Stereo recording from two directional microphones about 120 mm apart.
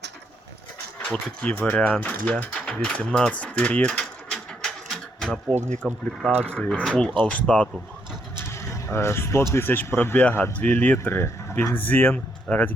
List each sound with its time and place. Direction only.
1.0 s speech: 10° left (ahead or behind)
3.4 s a sound: 10° left (ahead or behind)
5.5 s speech: 75° right (ahead or behind)
6.6 s speech: 5° left (ahead or behind)
8.4 s vehicle: 20° left (ahead or behind)
9.5 s speech: 20° left (ahead or behind)